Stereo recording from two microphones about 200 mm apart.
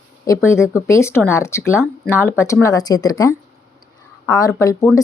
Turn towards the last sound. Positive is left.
turn(degrees=15)  # may be behind; listen again after turning